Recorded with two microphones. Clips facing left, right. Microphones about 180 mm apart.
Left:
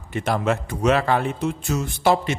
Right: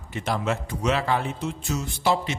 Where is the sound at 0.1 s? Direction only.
55° left (ahead or behind).